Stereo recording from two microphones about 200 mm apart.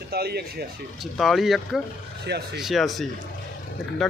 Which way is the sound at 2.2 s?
55° right (ahead or behind).